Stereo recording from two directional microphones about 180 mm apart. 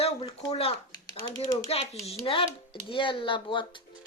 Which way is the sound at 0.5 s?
35° left (ahead or behind).